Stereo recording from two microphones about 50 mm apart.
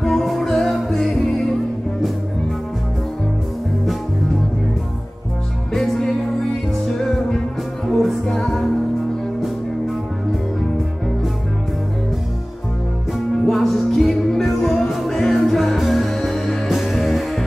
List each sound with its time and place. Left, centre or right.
0.0 s music: centre
5.7 s music: centre
7.8 s music: centre
13.5 s music: centre